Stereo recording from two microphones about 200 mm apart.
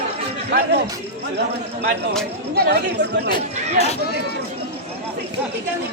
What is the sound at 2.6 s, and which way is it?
Speech, 55° right (ahead or behind).